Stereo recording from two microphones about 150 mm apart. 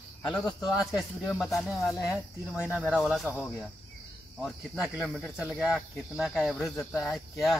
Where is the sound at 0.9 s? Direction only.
Centre (ahead or behind).